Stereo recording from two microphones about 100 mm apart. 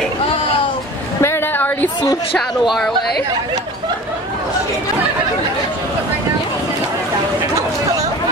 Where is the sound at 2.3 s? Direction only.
Centre (ahead or behind).